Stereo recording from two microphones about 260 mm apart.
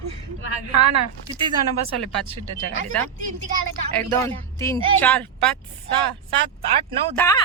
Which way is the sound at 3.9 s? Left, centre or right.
Centre.